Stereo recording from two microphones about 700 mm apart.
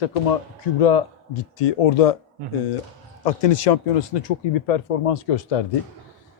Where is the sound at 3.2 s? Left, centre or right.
Left.